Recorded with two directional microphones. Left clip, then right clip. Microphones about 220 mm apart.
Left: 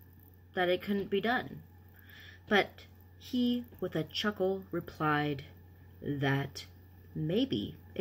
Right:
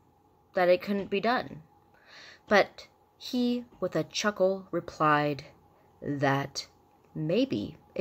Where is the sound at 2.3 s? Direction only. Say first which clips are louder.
Right 5 dB; 25° right (ahead or behind).